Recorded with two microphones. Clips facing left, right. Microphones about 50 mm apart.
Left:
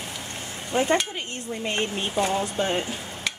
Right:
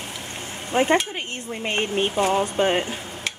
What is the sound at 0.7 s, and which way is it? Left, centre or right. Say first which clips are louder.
Speech: right 3 dB; right.